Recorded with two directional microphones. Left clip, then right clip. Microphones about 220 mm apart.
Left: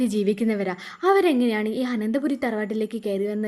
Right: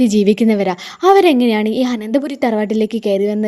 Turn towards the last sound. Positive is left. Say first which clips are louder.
# right 10 dB
turn(degrees=-25)  # may be behind; listen again after turning